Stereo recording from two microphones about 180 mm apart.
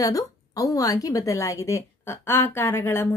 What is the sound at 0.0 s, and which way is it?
A woman's voice, 20° left (ahead or behind).